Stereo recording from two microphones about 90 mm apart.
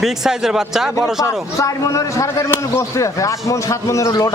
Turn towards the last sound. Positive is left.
turn(degrees=35)  # may be behind; listen again after turning